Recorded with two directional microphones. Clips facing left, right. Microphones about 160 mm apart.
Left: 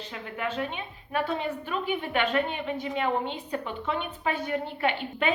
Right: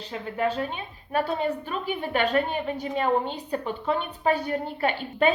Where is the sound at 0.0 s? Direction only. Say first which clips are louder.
Right 6 dB; 35° right (ahead or behind).